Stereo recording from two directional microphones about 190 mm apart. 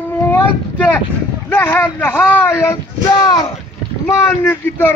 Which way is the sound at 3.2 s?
20° left (ahead or behind).